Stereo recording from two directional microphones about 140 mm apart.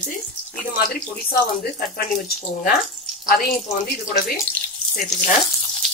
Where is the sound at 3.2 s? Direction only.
90° left.